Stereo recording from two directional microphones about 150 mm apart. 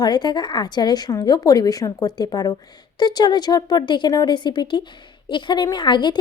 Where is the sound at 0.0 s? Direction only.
30° left (ahead or behind).